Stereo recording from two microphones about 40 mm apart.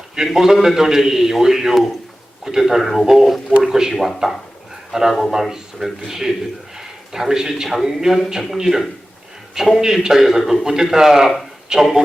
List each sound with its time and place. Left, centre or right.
0.3 s a man's voice: centre